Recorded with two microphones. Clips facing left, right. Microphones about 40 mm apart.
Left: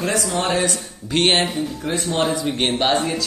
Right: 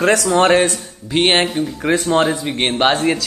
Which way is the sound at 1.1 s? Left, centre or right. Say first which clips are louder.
Right 3 dB; centre.